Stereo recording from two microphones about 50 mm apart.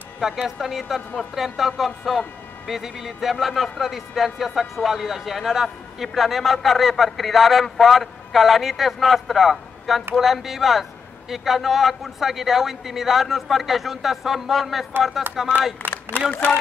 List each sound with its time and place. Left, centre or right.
0.2 s a man's voice: centre
15.8 s a man's voice: left